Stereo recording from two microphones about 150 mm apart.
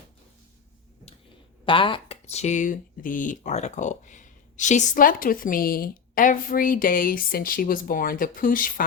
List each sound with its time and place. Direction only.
1.6 s speech: 35° left (ahead or behind); by 8.7 s 65° left (ahead or behind)